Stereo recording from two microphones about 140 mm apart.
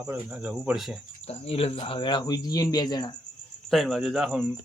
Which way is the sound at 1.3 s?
45° left (ahead or behind).